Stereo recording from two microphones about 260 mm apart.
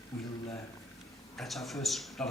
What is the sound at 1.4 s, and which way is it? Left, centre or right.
Speech, centre.